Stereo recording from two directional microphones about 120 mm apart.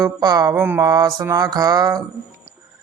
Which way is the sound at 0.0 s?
35° right (ahead or behind).